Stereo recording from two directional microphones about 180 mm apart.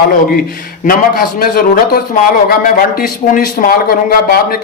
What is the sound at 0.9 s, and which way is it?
A man's voice, 50° left (ahead or behind).